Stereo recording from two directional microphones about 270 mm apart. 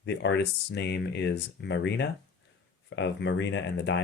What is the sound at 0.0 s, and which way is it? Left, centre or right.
Speech, left.